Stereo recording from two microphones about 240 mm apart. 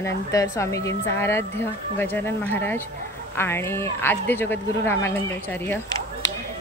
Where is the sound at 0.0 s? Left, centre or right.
Centre.